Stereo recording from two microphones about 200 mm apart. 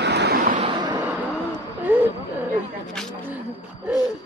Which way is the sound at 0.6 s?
20° right (ahead or behind).